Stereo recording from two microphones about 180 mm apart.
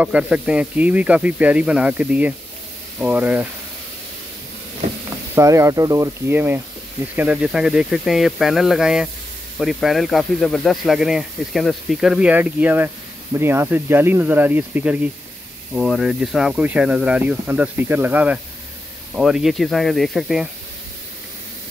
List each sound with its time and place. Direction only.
0.0 s speech: 5° right (ahead or behind)
5.3 s speech: 15° right (ahead or behind); by 20.4 s centre (ahead or behind)